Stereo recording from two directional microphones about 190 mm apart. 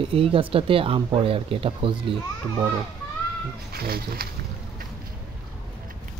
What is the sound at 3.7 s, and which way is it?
Speech, 50° right (ahead or behind).